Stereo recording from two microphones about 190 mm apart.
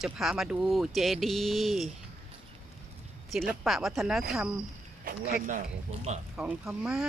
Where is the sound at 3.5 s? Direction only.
5° right (ahead or behind).